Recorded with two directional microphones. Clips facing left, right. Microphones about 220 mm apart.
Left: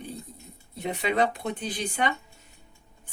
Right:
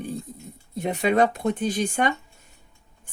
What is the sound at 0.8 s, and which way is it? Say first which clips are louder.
Speech: right 5 dB; 50° right (ahead or behind).